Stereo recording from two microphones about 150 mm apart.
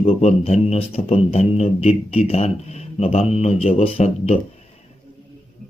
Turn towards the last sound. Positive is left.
turn(degrees=40)  # may be behind; listen again after turning